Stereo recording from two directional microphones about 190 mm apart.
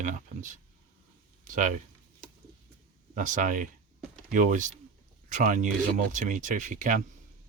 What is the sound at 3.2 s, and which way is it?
Speech, 45° right (ahead or behind).